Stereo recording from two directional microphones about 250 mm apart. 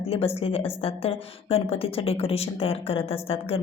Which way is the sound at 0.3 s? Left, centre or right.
Left.